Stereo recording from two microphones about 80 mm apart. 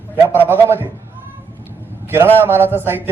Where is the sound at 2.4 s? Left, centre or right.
Right.